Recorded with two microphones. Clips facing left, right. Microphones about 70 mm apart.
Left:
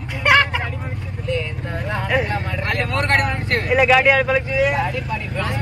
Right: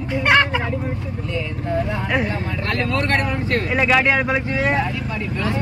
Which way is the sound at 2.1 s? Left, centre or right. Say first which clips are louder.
Left 3 dB; centre.